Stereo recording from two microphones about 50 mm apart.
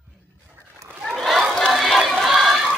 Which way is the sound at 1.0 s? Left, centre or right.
Centre.